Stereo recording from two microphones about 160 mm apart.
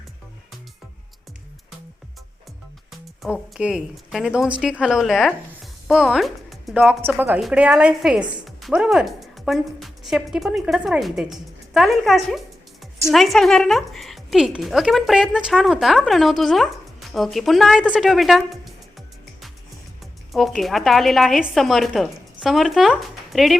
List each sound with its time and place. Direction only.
3.2 s a woman's voice: 5° right (ahead or behind)